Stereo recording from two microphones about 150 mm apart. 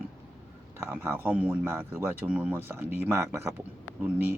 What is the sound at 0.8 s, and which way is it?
Speech, 15° right (ahead or behind).